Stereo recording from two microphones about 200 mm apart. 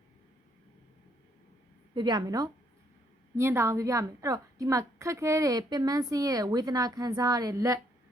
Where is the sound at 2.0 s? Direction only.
20° right (ahead or behind).